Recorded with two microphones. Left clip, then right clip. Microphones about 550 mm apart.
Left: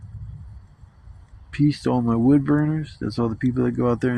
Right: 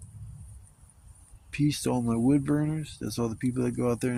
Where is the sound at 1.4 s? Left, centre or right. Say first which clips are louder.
Left 6 dB; right.